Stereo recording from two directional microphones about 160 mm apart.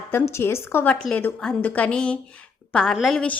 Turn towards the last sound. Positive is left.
turn(degrees=5)  # may be behind; listen again after turning